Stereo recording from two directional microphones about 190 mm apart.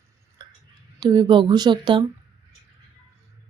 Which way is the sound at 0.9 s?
20° right (ahead or behind).